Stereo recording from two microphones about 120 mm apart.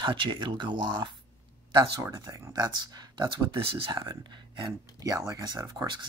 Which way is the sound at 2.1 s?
35° right (ahead or behind).